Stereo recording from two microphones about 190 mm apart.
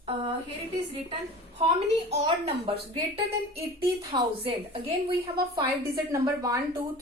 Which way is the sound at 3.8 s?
25° right (ahead or behind).